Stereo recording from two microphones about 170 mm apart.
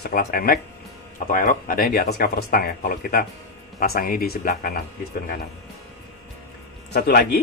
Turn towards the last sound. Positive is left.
turn(degrees=70)  # may be behind; listen again after turning